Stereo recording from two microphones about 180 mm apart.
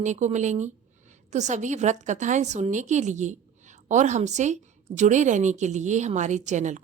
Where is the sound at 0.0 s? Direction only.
40° right (ahead or behind).